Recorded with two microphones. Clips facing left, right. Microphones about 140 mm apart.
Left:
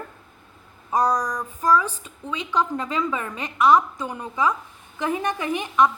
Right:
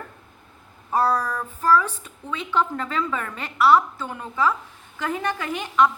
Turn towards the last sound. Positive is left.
turn(degrees=20)  # may be behind; listen again after turning